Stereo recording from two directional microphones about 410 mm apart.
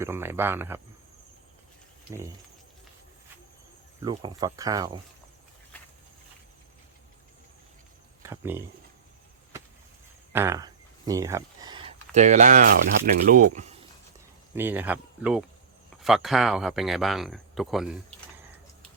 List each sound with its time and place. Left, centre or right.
0.0 s speech: centre
2.1 s speech: centre
4.0 s speech: centre
8.2 s speech: centre
10.3 s a sound: centre
13.2 s speech: centre
14.5 s speech: centre